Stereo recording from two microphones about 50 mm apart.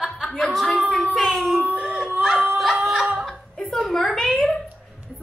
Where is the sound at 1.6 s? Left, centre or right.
Right.